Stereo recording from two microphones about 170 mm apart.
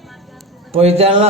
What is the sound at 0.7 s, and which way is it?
Speech, 35° right (ahead or behind).